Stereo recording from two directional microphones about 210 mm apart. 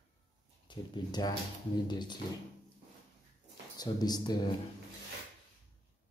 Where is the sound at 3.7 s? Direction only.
20° left (ahead or behind).